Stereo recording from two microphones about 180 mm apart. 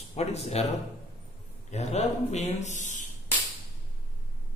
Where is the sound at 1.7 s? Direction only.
40° left (ahead or behind).